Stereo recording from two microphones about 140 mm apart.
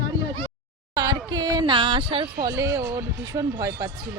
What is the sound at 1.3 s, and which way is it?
Speech, 30° right (ahead or behind).